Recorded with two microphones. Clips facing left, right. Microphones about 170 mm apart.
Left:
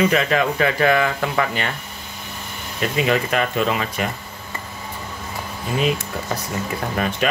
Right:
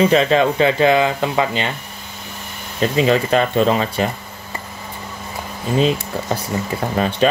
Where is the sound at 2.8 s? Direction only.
30° right (ahead or behind).